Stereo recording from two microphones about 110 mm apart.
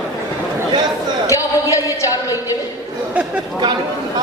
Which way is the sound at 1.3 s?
30° left (ahead or behind).